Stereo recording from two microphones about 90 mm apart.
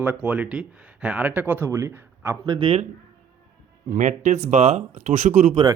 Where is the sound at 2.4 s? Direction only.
55° right (ahead or behind).